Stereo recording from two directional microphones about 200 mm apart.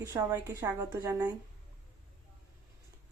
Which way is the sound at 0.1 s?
15° right (ahead or behind).